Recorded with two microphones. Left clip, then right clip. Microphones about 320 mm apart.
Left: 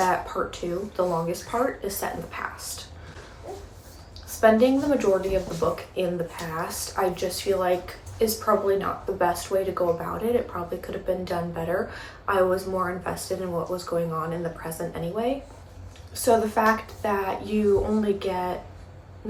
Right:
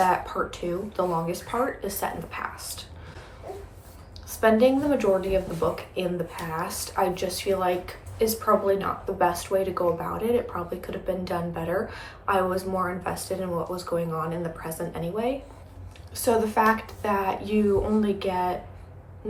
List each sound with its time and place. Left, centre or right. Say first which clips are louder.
0.0 s speech: right 1 dB; centre
4.3 s speech: left 1 dB; centre